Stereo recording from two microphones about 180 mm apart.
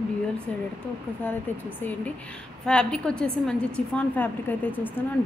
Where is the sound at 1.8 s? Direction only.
10° left (ahead or behind).